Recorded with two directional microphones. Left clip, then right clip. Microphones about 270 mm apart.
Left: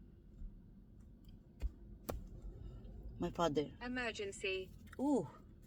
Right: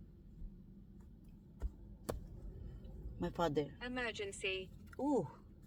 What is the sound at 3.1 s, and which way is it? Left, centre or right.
Speech, left.